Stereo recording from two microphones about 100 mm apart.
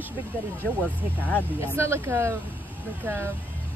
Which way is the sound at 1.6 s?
25° right (ahead or behind).